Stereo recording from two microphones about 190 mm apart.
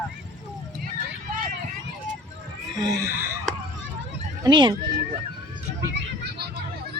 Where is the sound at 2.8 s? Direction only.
20° right (ahead or behind).